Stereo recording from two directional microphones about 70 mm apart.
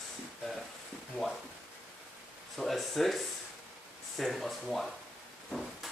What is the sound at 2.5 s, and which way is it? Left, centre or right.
Speech, centre.